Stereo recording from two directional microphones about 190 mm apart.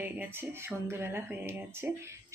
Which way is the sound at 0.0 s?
10° right (ahead or behind).